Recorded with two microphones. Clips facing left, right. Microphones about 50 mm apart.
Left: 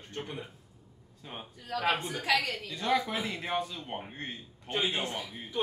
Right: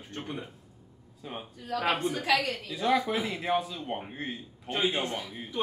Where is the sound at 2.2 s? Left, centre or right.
Right.